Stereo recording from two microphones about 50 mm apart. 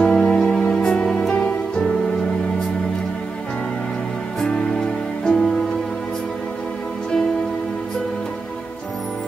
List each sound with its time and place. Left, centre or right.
0.0 s music: centre
4.4 s music: centre